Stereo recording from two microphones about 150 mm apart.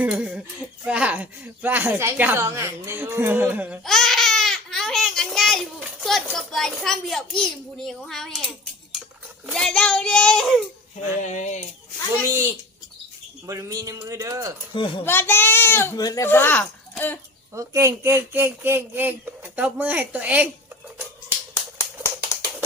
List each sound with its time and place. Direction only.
0.0 s speech: 5° right (ahead or behind)
3.8 s a child's voice: centre (ahead or behind)
10.9 s speech: 55° left (ahead or behind)
12.2 s speech: 20° right (ahead or behind)
14.7 s speech: 35° left (ahead or behind)
15.0 s a child's voice: 15° left (ahead or behind)
17.5 s speech: 20° right (ahead or behind)
22.3 s a sound: 20° left (ahead or behind)